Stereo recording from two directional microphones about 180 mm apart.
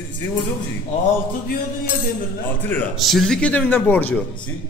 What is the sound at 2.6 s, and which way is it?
A man's voice, 10° left (ahead or behind).